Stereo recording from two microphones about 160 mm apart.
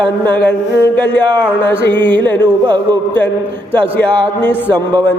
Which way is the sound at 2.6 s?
25° right (ahead or behind).